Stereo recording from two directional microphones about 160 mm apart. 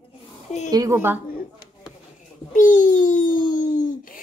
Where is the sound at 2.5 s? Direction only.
55° left (ahead or behind).